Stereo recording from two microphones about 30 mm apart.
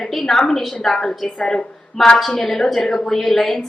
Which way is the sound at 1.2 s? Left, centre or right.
Left.